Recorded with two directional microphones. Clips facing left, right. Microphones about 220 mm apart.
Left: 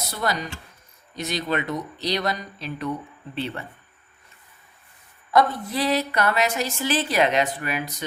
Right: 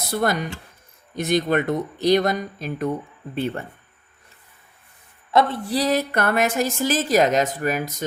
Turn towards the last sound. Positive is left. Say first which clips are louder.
# right 5 dB
turn(degrees=-45)  # may be behind; listen again after turning